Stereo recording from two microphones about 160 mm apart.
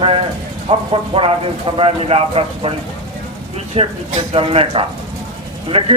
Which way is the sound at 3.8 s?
40° right (ahead or behind).